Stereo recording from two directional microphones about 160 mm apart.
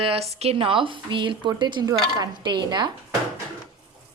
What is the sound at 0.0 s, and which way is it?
Speech, 40° right (ahead or behind).